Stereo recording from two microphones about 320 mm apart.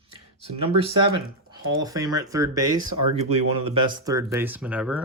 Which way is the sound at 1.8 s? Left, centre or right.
Centre.